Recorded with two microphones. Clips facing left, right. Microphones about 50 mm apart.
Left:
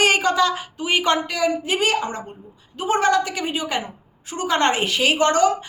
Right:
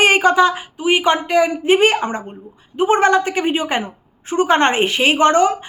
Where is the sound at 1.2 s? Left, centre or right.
Right.